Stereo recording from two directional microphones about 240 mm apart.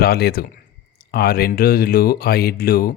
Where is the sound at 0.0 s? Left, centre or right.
Left.